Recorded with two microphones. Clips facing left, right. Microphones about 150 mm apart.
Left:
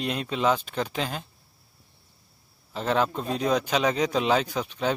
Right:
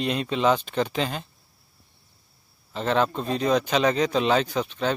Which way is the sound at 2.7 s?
5° left (ahead or behind).